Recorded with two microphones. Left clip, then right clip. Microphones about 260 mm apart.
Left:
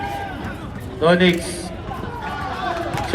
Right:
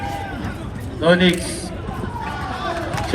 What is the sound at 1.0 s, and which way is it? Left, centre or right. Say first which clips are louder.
Speech: even; left.